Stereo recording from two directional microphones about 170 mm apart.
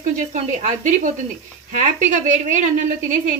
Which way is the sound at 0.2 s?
45° right (ahead or behind).